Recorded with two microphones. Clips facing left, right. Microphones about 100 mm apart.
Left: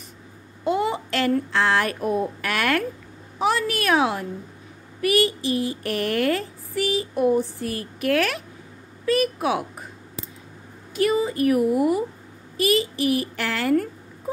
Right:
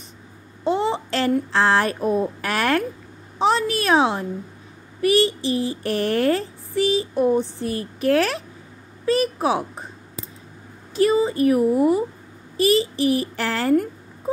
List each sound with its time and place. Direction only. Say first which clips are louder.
0.7 s a sound: right 2 dB; 30° right (ahead or behind)
1.5 s speech: right 3 dB; 30° right (ahead or behind)
11.0 s speech: right 3 dB; 30° right (ahead or behind)